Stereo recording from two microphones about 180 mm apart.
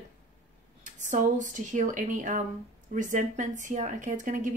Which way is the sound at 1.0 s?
45° right (ahead or behind).